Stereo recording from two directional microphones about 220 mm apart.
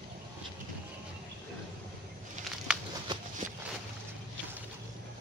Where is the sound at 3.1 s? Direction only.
20° right (ahead or behind).